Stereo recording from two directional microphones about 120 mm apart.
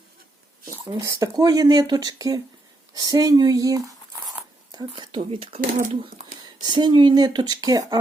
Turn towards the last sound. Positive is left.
turn(degrees=-30)  # may be behind; listen again after turning